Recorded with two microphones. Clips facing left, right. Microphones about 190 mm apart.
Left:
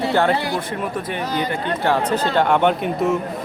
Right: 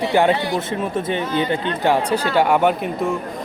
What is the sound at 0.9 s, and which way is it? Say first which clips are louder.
Speech: right 4 dB; 25° right (ahead or behind).